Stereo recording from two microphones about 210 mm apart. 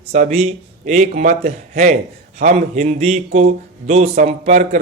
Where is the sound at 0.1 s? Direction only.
30° right (ahead or behind).